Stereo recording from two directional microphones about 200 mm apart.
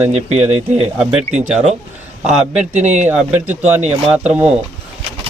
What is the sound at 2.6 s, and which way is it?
Speech, 10° right (ahead or behind).